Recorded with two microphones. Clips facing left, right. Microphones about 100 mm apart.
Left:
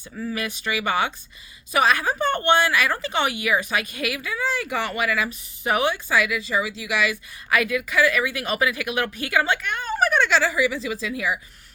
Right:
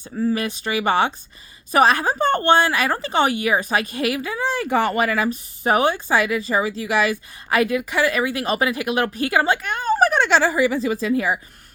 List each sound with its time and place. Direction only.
0.0 s speech: 30° right (ahead or behind)